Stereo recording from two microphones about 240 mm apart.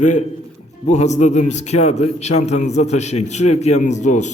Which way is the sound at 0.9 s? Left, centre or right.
Left.